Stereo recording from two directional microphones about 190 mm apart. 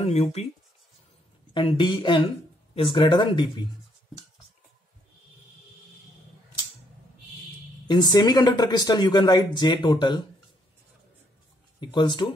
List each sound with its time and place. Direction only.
0.0 s speech: 35° left (ahead or behind)
1.5 s speech: 25° left (ahead or behind)
7.9 s speech: 20° left (ahead or behind)
11.8 s speech: 25° left (ahead or behind)